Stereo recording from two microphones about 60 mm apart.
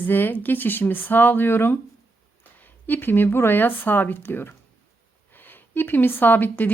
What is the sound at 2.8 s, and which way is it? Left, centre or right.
Speech, left.